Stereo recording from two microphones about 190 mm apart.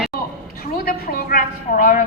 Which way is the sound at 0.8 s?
50° left (ahead or behind).